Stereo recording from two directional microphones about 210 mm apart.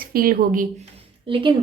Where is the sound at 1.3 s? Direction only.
25° right (ahead or behind).